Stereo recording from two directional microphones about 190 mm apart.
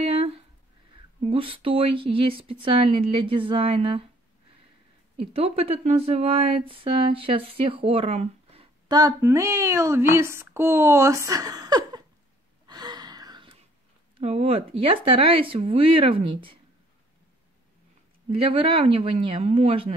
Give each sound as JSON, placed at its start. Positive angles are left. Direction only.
{"t": 0.0, "sound": "a sound", "side_deg": -30}
{"t": 1.3, "sound": "speech", "side_deg": -30}
{"t": 5.2, "sound": "speech", "side_deg": -30}
{"t": 12.6, "sound": "gasp", "side_deg": -20}
{"t": 14.2, "sound": "speech", "side_deg": -30}
{"t": 18.3, "sound": "speech", "side_deg": -30}